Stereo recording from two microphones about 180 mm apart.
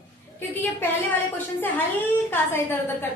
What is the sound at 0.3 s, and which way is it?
A woman's voice, 10° left (ahead or behind).